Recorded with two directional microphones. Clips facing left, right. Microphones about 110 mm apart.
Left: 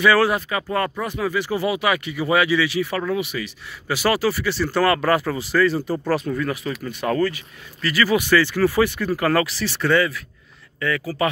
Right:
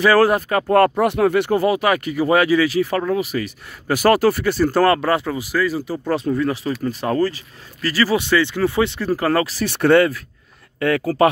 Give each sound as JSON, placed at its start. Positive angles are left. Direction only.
{"t": 0.0, "sound": "speech", "side_deg": -40}
{"t": 5.0, "sound": "speech", "side_deg": -20}
{"t": 6.0, "sound": "speech", "side_deg": -25}
{"t": 8.3, "sound": "speech", "side_deg": -20}
{"t": 9.6, "sound": "speech", "side_deg": -55}